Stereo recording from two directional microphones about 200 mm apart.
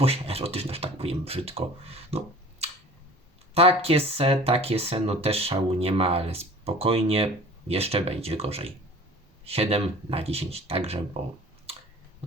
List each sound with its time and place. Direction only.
0.0 s speech: 30° right (ahead or behind)
3.5 s speech: 30° right (ahead or behind)